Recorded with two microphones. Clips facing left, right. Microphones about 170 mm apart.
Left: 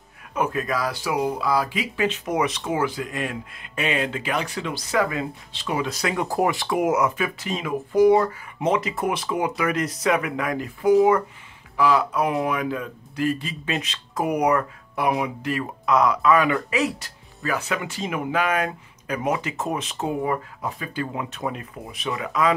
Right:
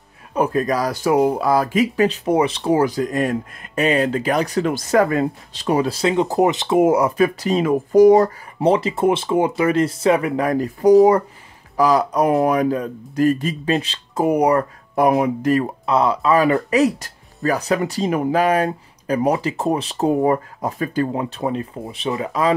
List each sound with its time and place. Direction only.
0.3 s speech: 35° right (ahead or behind)